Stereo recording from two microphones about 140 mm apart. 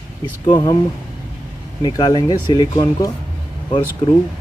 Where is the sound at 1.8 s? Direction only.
35° left (ahead or behind).